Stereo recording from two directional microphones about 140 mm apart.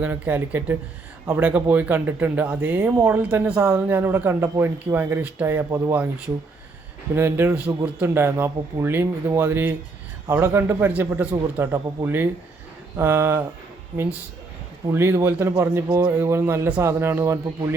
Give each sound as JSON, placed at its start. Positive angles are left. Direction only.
{"t": 0.0, "sound": "speech", "side_deg": -10}
{"t": 7.2, "sound": "speech", "side_deg": -15}
{"t": 14.9, "sound": "speech", "side_deg": -15}